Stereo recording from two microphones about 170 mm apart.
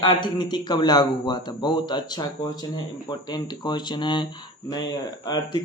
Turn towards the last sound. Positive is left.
turn(degrees=25)  # may be behind; listen again after turning